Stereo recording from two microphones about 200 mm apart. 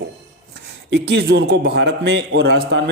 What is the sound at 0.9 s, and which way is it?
A man's voice, 55° right (ahead or behind).